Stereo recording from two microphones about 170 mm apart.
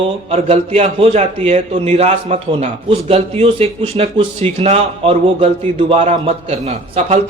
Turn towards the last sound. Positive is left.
turn(degrees=-40)  # may be behind; listen again after turning